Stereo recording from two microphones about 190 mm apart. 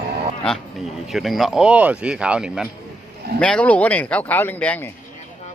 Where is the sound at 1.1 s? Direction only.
Centre (ahead or behind).